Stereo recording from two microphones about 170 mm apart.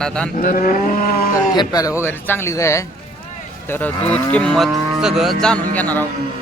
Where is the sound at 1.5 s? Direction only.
20° left (ahead or behind).